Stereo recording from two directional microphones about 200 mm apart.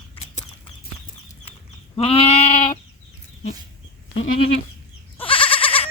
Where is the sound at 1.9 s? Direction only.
30° left (ahead or behind).